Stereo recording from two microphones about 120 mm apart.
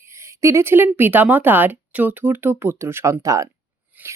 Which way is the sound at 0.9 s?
15° right (ahead or behind).